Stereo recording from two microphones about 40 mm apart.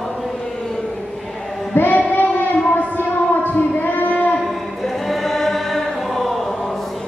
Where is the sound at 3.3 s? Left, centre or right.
Left.